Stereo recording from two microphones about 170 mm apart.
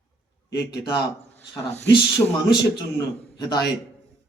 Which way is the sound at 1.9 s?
25° left (ahead or behind).